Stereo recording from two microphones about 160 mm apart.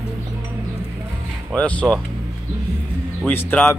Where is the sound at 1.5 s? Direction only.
10° left (ahead or behind).